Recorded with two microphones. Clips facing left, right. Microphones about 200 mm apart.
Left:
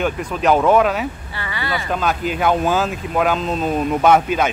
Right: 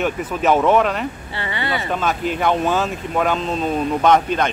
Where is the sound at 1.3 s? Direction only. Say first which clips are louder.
Right 1 dB; 25° right (ahead or behind).